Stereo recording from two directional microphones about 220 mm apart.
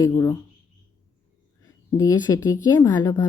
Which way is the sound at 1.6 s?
15° left (ahead or behind).